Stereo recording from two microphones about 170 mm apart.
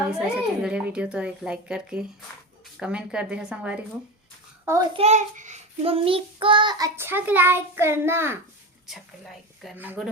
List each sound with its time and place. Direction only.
0.1 s a child's voice: 5° right (ahead or behind)
4.9 s child singing: 40° right (ahead or behind); by 8.4 s 15° right (ahead or behind)
8.9 s speech: centre (ahead or behind)
9.7 s speech: 10° right (ahead or behind)